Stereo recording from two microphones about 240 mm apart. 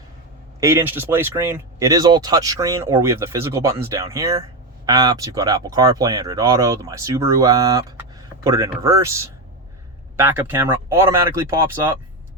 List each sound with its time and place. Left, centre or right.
0.6 s speech: centre